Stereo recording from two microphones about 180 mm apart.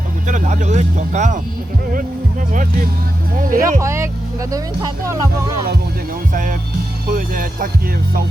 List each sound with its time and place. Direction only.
0.3 s speech: 45° right (ahead or behind)
2.5 s speech: 50° right (ahead or behind)
3.8 s speech: 15° right (ahead or behind)
6.3 s speech: 45° right (ahead or behind)